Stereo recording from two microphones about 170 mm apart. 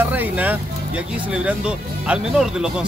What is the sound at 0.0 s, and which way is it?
Speech, 10° right (ahead or behind).